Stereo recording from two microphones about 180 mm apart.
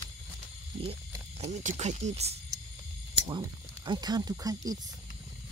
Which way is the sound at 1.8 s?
40° right (ahead or behind).